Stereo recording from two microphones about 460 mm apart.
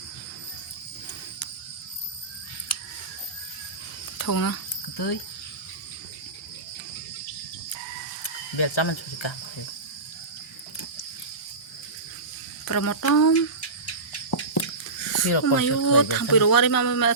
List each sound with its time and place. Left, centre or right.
4.2 s a sound: left
8.2 s cricket: left
12.6 s speech: left
13.0 s speech: left
14.3 s a sound: left
15.5 s speech: left